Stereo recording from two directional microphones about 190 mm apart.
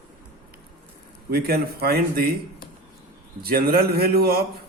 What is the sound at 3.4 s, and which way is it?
Speech, 50° right (ahead or behind).